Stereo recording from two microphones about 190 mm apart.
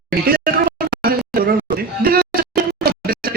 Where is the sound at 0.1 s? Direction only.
50° right (ahead or behind).